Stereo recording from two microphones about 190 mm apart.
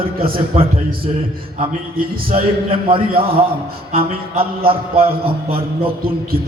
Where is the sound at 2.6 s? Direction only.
30° right (ahead or behind).